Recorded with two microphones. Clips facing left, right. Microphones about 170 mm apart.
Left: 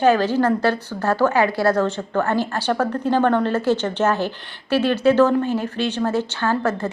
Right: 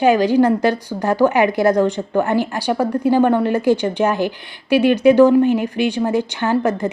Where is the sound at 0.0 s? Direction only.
15° right (ahead or behind).